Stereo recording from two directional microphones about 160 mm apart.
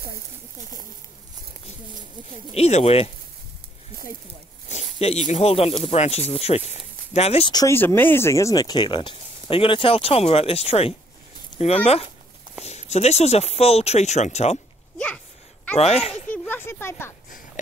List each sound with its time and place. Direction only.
2.5 s speech: 40° left (ahead or behind)
4.6 s speech: 45° left (ahead or behind)
7.5 s speech: 15° left (ahead or behind); by 14.6 s 45° left (ahead or behind)
15.8 s speech: 40° left (ahead or behind)
16.3 s speech: 10° left (ahead or behind)